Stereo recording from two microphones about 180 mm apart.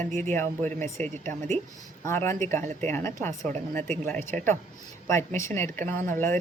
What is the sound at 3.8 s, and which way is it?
Speech, 40° right (ahead or behind).